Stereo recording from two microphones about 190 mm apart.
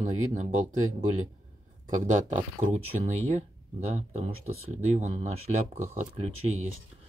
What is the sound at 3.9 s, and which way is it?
Speech, 40° right (ahead or behind).